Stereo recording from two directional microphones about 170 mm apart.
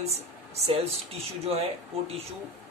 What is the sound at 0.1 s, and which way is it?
Speech, 40° right (ahead or behind).